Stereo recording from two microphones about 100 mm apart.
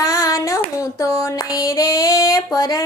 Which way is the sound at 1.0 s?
35° left (ahead or behind).